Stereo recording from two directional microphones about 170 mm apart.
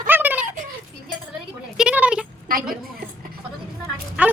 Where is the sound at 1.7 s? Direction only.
5° right (ahead or behind).